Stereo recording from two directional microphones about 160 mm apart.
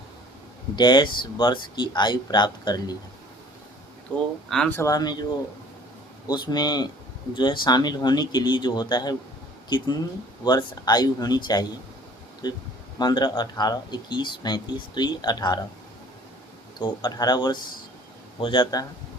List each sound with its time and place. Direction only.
0.8 s speech: 30° left (ahead or behind)
4.1 s speech: 10° left (ahead or behind)
4.7 s speech: 20° left (ahead or behind)
6.2 s speech: 25° left (ahead or behind)
16.8 s speech: 25° left (ahead or behind)